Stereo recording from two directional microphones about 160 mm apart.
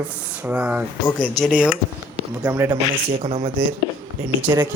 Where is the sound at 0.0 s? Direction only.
5° right (ahead or behind).